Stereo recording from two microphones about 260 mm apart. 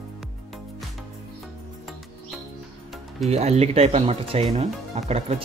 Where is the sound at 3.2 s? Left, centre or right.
Right.